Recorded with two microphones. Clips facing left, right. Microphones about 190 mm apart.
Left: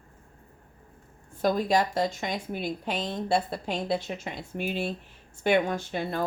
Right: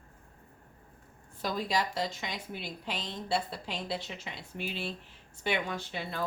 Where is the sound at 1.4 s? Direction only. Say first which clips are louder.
Left 8 dB; 50° left (ahead or behind).